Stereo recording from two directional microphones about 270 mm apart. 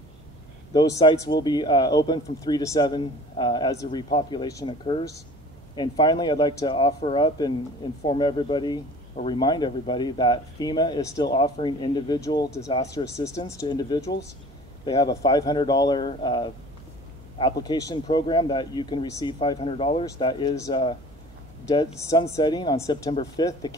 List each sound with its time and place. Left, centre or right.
0.7 s speech: centre